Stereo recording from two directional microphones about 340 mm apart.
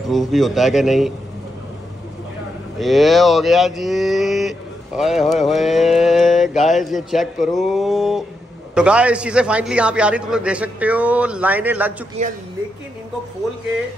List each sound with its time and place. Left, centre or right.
0.0 s speech: centre
2.8 s speech: centre
12.2 s speech: centre